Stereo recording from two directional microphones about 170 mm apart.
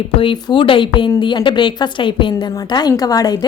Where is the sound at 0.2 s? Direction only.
30° left (ahead or behind).